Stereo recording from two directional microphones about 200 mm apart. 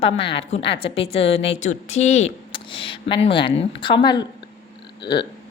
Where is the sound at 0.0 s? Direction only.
30° left (ahead or behind).